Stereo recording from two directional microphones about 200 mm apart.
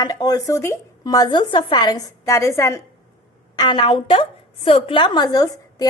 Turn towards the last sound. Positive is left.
turn(degrees=20)  # may be behind; listen again after turning